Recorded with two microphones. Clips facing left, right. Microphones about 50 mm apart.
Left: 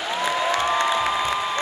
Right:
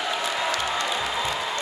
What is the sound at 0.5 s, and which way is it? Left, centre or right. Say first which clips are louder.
Music: left 5 dB; left.